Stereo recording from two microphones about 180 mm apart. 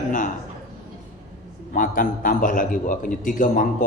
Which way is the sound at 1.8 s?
50° left (ahead or behind).